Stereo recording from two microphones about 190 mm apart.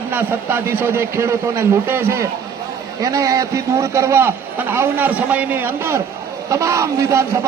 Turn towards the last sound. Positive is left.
turn(degrees=-15)  # may be behind; listen again after turning